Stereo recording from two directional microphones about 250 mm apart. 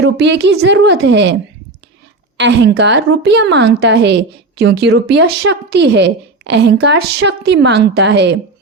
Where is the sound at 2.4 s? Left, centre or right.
Right.